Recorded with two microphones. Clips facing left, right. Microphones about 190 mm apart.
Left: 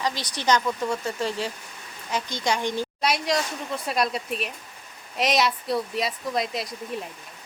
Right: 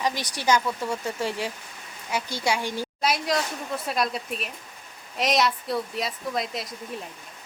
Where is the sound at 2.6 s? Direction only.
20° left (ahead or behind).